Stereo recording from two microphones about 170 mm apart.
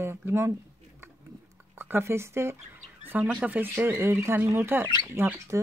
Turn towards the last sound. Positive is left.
turn(degrees=-15)  # may be behind; listen again after turning